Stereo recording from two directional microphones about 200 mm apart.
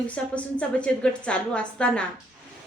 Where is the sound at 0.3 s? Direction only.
5° left (ahead or behind).